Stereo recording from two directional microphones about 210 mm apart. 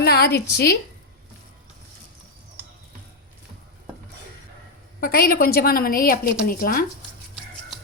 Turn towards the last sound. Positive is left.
turn(degrees=45)  # may be behind; listen again after turning